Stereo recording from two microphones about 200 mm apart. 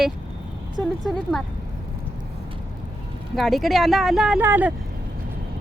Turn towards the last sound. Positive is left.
turn(degrees=-10)  # may be behind; listen again after turning